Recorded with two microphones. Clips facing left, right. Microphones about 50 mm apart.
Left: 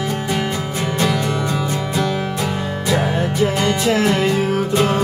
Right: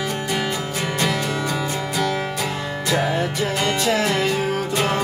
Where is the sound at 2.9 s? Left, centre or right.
Centre.